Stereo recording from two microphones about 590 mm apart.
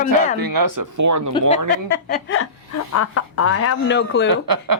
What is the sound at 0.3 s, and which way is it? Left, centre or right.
Speech, right.